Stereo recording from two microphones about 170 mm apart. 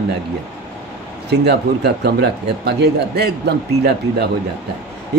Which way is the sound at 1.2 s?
75° right (ahead or behind).